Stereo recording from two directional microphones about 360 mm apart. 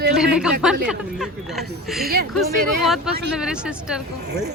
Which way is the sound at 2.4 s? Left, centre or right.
Centre.